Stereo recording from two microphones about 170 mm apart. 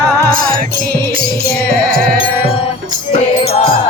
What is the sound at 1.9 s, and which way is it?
Music, 60° right (ahead or behind).